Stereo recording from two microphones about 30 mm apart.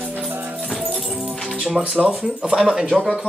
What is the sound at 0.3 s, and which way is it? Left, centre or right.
Music, right.